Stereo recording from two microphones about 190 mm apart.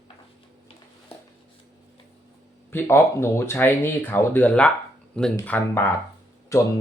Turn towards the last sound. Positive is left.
turn(degrees=15)  # may be behind; listen again after turning